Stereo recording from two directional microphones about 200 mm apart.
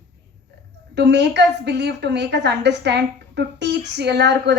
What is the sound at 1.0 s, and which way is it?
A woman's voice, 60° right (ahead or behind).